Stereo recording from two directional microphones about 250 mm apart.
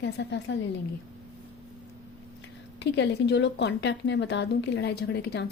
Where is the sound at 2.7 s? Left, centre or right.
Left.